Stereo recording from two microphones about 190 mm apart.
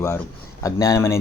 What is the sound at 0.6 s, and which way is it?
Speech, 15° left (ahead or behind).